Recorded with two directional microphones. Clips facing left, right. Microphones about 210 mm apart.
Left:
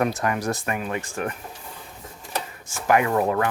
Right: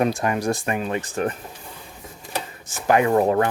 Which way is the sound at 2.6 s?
20° right (ahead or behind).